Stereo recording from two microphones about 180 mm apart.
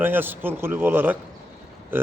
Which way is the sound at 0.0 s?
10° right (ahead or behind).